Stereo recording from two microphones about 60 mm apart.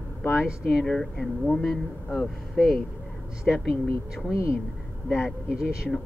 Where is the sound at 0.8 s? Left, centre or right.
Centre.